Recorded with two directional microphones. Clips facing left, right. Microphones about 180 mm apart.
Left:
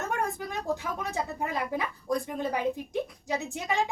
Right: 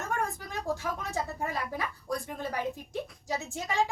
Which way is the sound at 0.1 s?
15° left (ahead or behind).